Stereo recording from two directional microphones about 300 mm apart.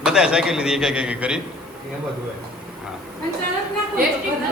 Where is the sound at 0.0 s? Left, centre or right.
Centre.